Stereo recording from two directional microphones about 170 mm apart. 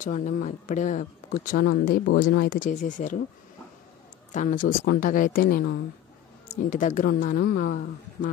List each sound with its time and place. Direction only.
0.0 s speech: 45° left (ahead or behind)
1.7 s a woman's voice: 60° left (ahead or behind)
4.3 s a woman's voice: 50° left (ahead or behind)
6.5 s speech: 50° left (ahead or behind)